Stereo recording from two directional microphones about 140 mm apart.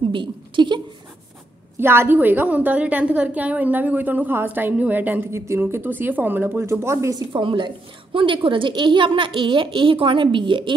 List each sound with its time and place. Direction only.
0.1 s a woman's voice: 35° right (ahead or behind)
1.8 s a woman's voice: 15° right (ahead or behind)
7.3 s a woman's voice: 35° right (ahead or behind)